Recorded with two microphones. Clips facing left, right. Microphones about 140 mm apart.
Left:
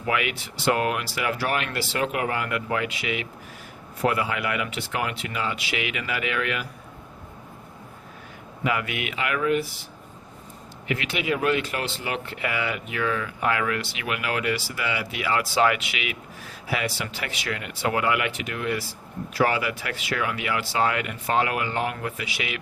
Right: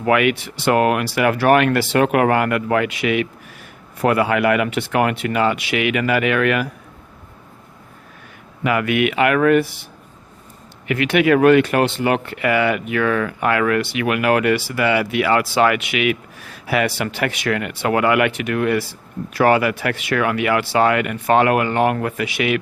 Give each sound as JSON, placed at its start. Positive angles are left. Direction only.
{"t": 0.0, "sound": "speech", "side_deg": -65}
{"t": 8.6, "sound": "speech", "side_deg": -65}
{"t": 10.8, "sound": "speech", "side_deg": -65}